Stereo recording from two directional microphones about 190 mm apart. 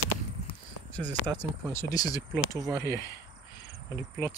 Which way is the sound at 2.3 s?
15° right (ahead or behind).